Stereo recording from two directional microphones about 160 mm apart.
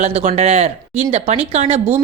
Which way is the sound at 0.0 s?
40° right (ahead or behind).